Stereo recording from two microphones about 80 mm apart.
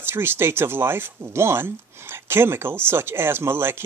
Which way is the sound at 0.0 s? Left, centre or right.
Right.